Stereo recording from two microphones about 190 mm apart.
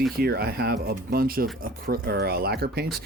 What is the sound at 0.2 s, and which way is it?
Speech, 55° right (ahead or behind).